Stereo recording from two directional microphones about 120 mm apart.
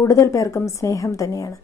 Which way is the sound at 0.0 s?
25° left (ahead or behind).